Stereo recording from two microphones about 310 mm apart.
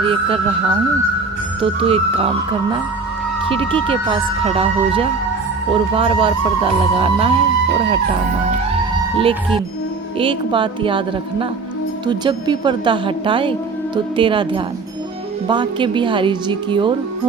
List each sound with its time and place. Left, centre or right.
0.0 s speech: centre
1.6 s speech: centre
9.1 s speech: centre